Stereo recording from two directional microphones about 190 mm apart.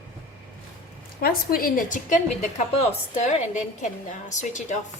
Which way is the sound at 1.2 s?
50° left (ahead or behind).